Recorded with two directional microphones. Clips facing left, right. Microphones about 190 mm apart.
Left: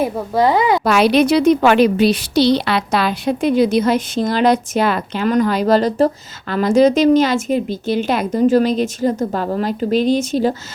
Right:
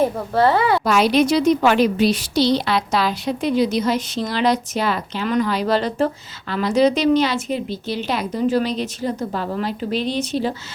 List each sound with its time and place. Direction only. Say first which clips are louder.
0.0 s a woman's voice: left 1 dB; 15° left (ahead or behind)
0.9 s a woman's voice: left 4 dB; 70° left (ahead or behind); by 10.5 s 45° left (ahead or behind)